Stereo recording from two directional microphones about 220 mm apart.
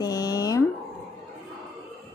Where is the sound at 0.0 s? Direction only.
15° left (ahead or behind).